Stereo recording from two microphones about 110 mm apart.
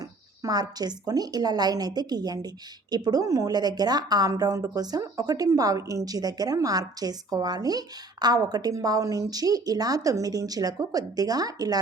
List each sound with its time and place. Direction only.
0.4 s a woman's voice: 35° right (ahead or behind)